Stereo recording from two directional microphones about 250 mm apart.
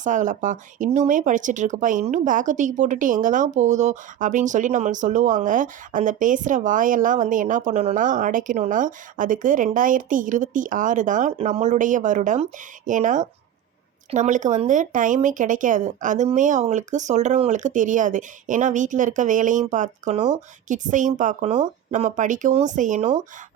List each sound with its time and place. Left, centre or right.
0.0 s speech: right